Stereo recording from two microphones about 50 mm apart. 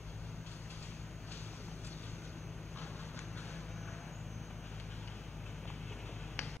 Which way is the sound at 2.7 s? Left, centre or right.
Left.